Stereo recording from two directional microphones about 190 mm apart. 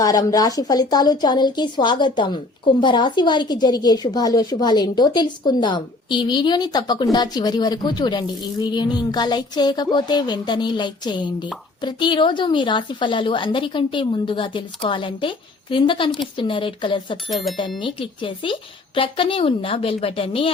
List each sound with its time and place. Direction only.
0.0 s a woman's voice: 20° left (ahead or behind)